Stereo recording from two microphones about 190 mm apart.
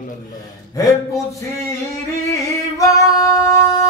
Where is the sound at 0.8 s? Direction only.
20° left (ahead or behind).